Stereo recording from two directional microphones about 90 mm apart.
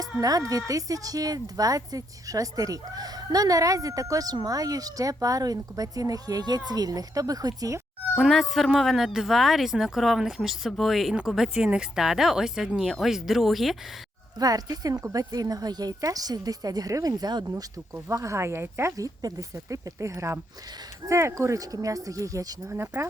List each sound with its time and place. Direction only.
0.2 s a woman's voice: 40° right (ahead or behind)
8.2 s speech: centre (ahead or behind)
14.3 s a woman's voice: 45° right (ahead or behind)
18.1 s a woman's voice: 35° right (ahead or behind)